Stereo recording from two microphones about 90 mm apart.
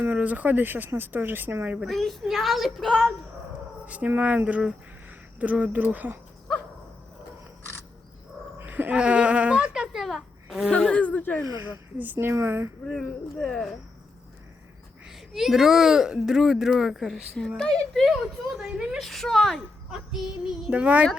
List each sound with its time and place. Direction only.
0.0 s speech: 20° right (ahead or behind)
1.8 s speech: centre (ahead or behind)
3.8 s speech: 15° right (ahead or behind)
8.5 s a sound: 20° right (ahead or behind); by 10.7 s centre (ahead or behind)
10.7 s a sound: 10° left (ahead or behind)
11.6 s speech: 20° right (ahead or behind)
12.9 s speech: 10° left (ahead or behind)
15.0 s speech: 5° right (ahead or behind)
18.6 s speech: 5° right (ahead or behind)
19.9 s child singing: 5° right (ahead or behind)
20.7 s speech: 15° right (ahead or behind)